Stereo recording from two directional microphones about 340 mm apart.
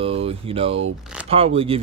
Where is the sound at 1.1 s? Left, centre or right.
Centre.